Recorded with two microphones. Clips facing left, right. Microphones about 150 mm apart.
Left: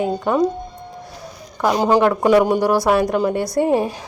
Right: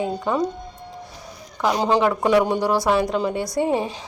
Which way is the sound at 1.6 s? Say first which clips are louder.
Left 4 dB; 10° left (ahead or behind).